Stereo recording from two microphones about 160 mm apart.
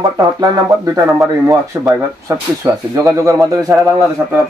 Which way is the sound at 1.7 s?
15° right (ahead or behind).